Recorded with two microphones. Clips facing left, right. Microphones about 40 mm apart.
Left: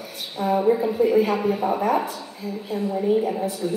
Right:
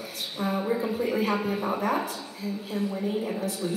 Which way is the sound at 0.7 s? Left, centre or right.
Centre.